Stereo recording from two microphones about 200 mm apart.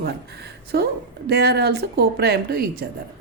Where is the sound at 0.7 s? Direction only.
55° right (ahead or behind).